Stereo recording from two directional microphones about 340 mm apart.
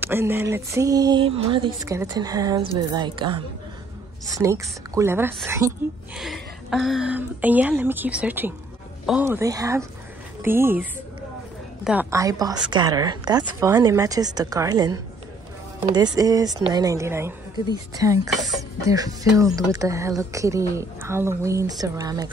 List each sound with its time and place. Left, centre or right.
0.0 s a woman's voice: centre